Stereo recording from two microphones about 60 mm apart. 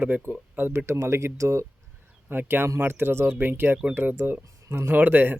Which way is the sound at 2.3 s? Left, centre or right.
Right.